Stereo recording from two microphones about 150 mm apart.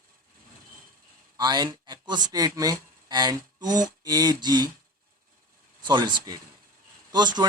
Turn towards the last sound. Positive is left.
turn(degrees=-30)  # may be behind; listen again after turning